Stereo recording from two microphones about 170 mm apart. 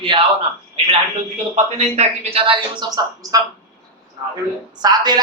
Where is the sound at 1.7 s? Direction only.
40° right (ahead or behind); by 3.4 s 20° right (ahead or behind).